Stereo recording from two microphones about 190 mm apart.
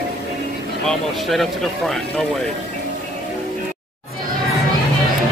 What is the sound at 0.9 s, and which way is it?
Speech, centre (ahead or behind).